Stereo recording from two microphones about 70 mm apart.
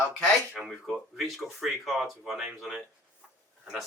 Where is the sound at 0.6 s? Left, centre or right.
Centre.